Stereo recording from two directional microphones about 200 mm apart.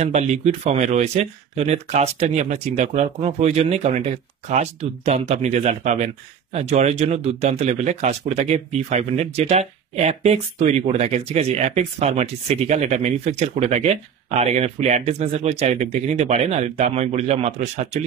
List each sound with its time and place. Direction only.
0.0 s speech: 35° right (ahead or behind)